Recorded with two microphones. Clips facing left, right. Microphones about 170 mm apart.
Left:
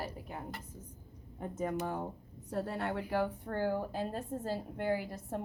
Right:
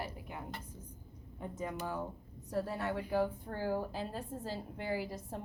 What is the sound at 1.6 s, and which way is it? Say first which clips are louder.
Speech: left 4 dB; 50° left (ahead or behind).